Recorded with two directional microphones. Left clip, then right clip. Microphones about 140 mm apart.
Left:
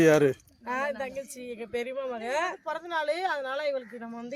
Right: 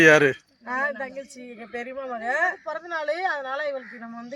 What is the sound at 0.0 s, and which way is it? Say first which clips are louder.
Speech: right 6 dB; 5° left (ahead or behind).